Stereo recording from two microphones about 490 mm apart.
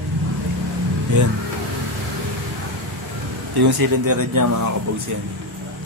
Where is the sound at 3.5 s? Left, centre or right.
Right.